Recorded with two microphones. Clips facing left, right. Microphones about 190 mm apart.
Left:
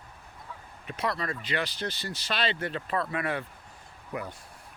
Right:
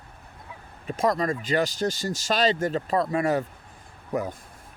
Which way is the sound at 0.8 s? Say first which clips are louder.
Right 8 dB; 45° right (ahead or behind).